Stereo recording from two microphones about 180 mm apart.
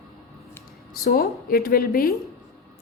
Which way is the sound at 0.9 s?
55° left (ahead or behind).